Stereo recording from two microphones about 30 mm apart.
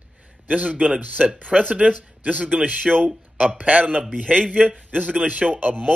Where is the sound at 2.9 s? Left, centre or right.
Centre.